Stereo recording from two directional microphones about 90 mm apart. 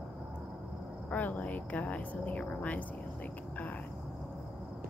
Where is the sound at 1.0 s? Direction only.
20° left (ahead or behind).